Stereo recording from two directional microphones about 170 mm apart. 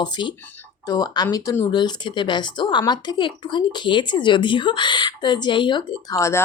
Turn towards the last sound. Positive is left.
turn(degrees=15)  # may be behind; listen again after turning